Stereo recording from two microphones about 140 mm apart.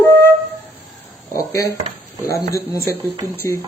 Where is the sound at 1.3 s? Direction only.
20° left (ahead or behind).